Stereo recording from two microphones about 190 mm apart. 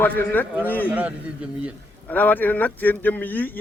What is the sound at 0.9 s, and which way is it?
Speech, 5° right (ahead or behind).